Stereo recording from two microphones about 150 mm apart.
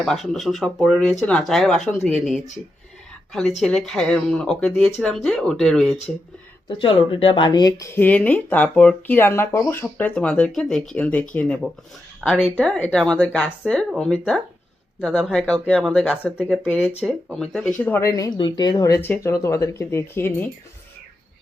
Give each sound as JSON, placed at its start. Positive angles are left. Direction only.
{"t": 0.0, "sound": "speech", "side_deg": 0}
{"t": 3.6, "sound": "speech", "side_deg": 5}
{"t": 6.7, "sound": "speech", "side_deg": 35}
{"t": 17.9, "sound": "speech", "side_deg": 20}